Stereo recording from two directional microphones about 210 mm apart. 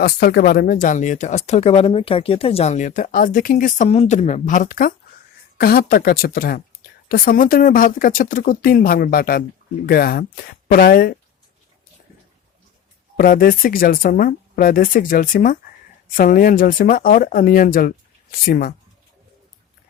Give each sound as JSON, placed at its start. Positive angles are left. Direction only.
{"t": 0.0, "sound": "speech", "side_deg": 50}
{"t": 13.1, "sound": "speech", "side_deg": 45}